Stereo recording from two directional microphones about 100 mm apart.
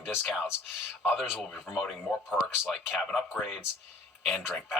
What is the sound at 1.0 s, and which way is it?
Speech, 5° right (ahead or behind).